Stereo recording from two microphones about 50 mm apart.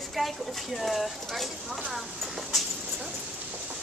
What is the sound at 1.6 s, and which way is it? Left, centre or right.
Speech, right.